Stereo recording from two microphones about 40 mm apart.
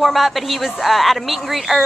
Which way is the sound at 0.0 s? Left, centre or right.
Centre.